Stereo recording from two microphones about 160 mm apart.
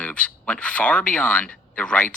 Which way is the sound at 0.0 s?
5° left (ahead or behind).